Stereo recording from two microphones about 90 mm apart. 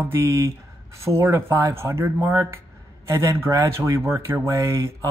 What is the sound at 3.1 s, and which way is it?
Speech, 30° right (ahead or behind).